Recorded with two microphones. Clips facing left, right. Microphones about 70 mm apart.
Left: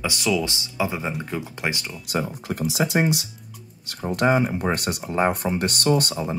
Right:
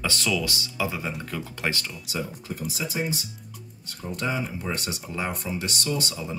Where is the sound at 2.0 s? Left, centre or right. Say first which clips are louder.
Left 8 dB; left.